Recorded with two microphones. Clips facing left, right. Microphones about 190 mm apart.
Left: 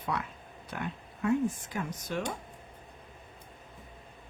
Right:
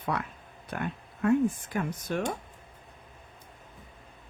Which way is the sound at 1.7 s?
55° right (ahead or behind).